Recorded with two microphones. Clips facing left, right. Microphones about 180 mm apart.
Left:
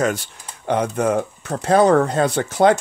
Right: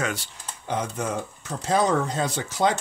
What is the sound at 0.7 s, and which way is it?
Speech, 65° left (ahead or behind).